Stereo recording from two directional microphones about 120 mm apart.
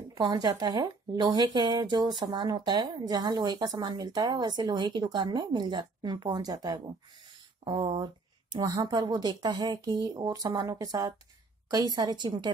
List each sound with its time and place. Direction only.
0.1 s speech: 30° right (ahead or behind)
7.8 s speech: 50° right (ahead or behind)
8.5 s speech: 35° right (ahead or behind)